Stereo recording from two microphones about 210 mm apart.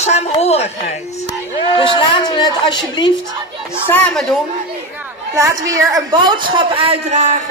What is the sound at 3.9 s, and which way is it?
Speech, 10° left (ahead or behind).